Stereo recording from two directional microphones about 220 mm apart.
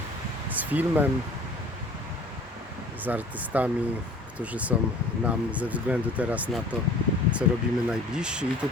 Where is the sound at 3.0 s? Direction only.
5° right (ahead or behind).